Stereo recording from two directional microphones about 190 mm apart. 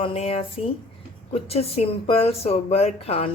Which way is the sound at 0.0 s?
30° left (ahead or behind).